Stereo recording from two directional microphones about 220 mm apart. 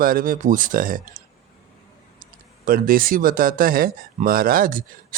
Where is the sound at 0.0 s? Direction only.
40° right (ahead or behind).